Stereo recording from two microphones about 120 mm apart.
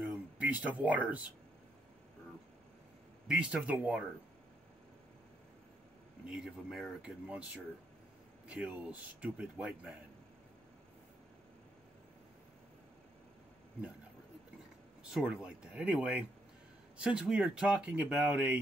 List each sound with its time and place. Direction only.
0.0 s a sound: 15° right (ahead or behind)
3.3 s speech: 5° right (ahead or behind)
6.2 s speech: 5° right (ahead or behind)
8.5 s speech: 10° right (ahead or behind)
15.0 s speech: 5° right (ahead or behind)